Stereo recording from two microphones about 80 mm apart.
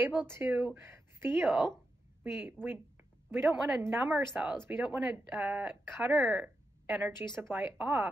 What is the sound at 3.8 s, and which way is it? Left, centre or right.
Speech, right.